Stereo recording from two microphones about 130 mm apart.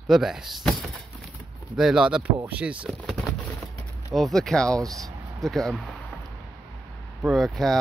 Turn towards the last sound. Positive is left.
turn(degrees=0)  # may be behind; listen again after turning